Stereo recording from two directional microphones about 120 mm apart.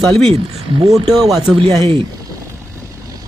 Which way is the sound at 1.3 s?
5° right (ahead or behind).